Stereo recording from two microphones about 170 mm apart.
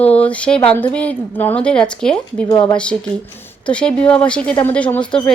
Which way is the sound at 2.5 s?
20° left (ahead or behind).